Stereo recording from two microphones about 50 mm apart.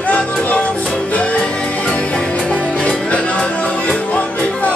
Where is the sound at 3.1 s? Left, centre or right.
Left.